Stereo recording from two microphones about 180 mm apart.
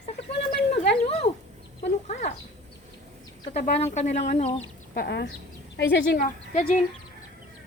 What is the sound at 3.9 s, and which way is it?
Speech, 40° left (ahead or behind).